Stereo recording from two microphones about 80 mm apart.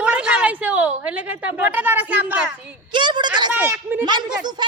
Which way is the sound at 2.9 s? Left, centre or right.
Right.